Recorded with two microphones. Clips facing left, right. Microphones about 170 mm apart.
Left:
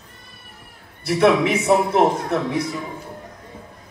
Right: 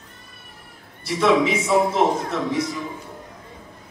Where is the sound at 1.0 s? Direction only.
65° left (ahead or behind).